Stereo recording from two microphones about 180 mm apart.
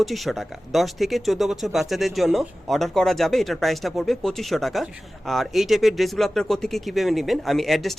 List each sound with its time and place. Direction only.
0.0 s speech: centre (ahead or behind)